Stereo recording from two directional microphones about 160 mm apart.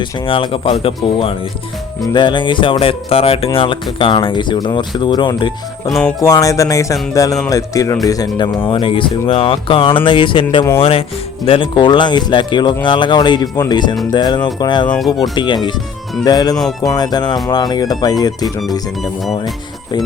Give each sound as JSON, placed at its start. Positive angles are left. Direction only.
{"t": 0.0, "sound": "speech", "side_deg": 30}
{"t": 5.9, "sound": "music", "side_deg": 5}
{"t": 6.2, "sound": "speech", "side_deg": 20}
{"t": 14.8, "sound": "music", "side_deg": 5}
{"t": 15.2, "sound": "speech", "side_deg": 30}